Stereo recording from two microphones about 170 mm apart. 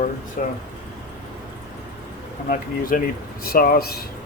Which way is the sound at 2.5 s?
55° left (ahead or behind).